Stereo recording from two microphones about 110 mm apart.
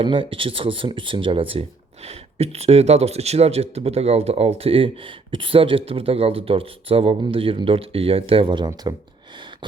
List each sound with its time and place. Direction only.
0.0 s speech: 50° right (ahead or behind)
2.0 s speech: 70° right (ahead or behind); by 8.9 s 45° right (ahead or behind)